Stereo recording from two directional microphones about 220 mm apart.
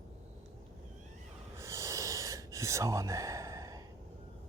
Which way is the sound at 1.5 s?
15° right (ahead or behind).